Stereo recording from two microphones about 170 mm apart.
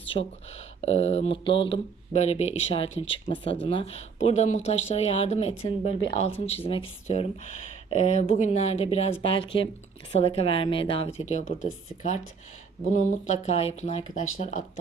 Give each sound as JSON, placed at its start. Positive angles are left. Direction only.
{"t": 0.1, "sound": "speech", "side_deg": 35}
{"t": 11.3, "sound": "speech", "side_deg": 45}